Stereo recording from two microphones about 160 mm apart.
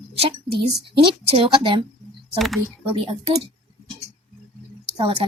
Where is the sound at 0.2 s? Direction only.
35° right (ahead or behind).